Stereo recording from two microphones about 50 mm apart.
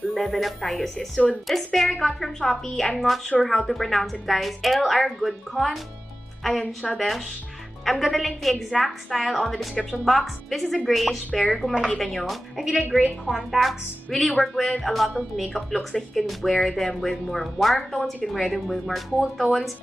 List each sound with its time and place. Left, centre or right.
0.1 s a woman's voice: centre
6.6 s a woman's voice: centre